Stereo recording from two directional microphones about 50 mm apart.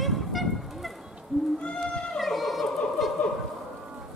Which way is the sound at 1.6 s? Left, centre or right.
Left.